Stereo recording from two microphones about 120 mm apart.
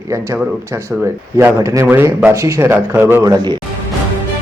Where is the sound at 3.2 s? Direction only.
35° right (ahead or behind).